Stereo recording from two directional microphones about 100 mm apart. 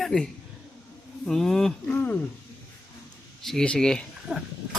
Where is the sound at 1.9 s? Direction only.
15° left (ahead or behind).